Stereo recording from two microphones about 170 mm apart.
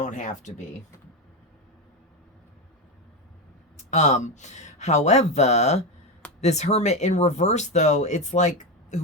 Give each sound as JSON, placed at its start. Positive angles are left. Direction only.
{"t": 0.0, "sound": "speech", "side_deg": 45}
{"t": 3.9, "sound": "speech", "side_deg": 45}